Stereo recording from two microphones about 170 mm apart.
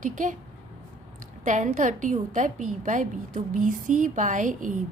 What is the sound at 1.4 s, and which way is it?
A woman's voice, 45° right (ahead or behind).